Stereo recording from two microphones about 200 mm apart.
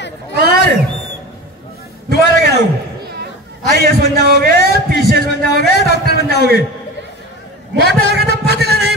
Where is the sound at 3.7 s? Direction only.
50° right (ahead or behind).